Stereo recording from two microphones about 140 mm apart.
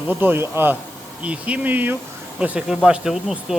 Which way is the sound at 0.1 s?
15° right (ahead or behind).